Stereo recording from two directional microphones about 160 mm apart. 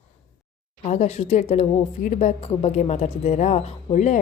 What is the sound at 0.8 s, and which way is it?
A woman's voice, 40° left (ahead or behind).